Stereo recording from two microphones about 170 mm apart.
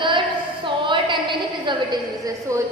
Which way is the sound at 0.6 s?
30° right (ahead or behind).